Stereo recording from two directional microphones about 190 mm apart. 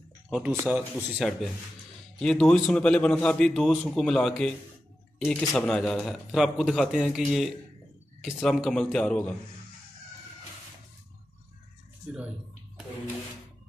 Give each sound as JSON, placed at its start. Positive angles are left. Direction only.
{"t": 0.5, "sound": "a man's voice", "side_deg": -10}